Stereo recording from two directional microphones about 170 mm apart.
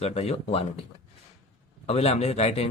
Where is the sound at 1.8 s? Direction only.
35° left (ahead or behind).